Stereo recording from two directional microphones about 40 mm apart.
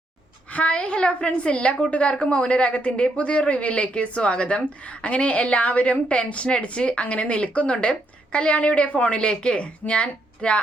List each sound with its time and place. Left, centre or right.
0.5 s a woman's voice: left